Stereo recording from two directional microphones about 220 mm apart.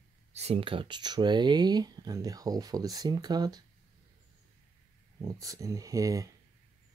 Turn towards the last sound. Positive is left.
turn(degrees=-15)  # may be behind; listen again after turning